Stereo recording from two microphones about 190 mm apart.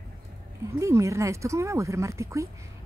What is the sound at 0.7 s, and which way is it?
Speech, 15° right (ahead or behind).